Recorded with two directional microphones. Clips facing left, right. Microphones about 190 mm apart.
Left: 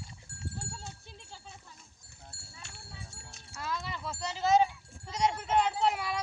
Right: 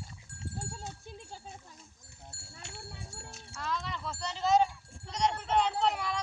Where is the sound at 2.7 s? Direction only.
60° right (ahead or behind).